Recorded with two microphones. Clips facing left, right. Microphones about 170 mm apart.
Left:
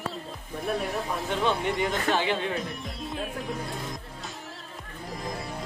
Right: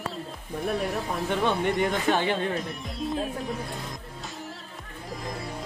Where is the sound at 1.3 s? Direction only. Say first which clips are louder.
Right 2 dB; 50° right (ahead or behind).